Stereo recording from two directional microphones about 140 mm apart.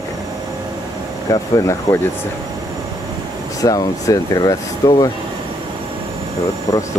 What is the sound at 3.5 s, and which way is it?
Speech, 25° left (ahead or behind).